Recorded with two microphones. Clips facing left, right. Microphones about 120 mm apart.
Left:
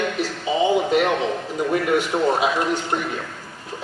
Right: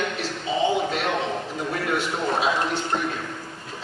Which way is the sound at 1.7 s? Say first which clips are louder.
Left 6 dB; 15° left (ahead or behind).